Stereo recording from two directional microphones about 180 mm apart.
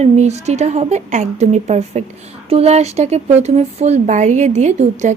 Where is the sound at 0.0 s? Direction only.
35° right (ahead or behind).